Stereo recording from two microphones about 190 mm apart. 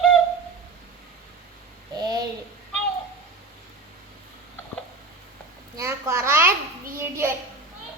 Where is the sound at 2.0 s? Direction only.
20° right (ahead or behind).